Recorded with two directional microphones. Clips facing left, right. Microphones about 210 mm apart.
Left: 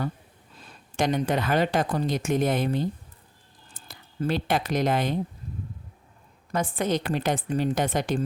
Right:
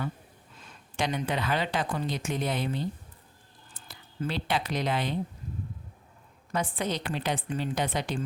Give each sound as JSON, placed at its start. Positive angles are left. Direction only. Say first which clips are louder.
{"t": 0.5, "sound": "speech", "louder": "left 5 dB", "side_deg": 35}
{"t": 6.5, "sound": "a woman's voice", "louder": "left 5 dB", "side_deg": 45}